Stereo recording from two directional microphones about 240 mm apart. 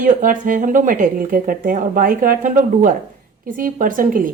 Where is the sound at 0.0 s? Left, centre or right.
Right.